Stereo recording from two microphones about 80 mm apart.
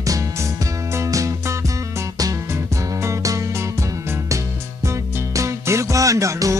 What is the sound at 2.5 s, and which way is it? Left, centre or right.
Music, right.